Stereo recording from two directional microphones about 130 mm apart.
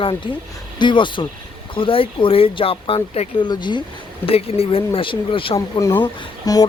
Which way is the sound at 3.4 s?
35° left (ahead or behind).